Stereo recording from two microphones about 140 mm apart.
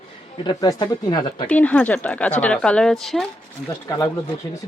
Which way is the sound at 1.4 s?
10° left (ahead or behind).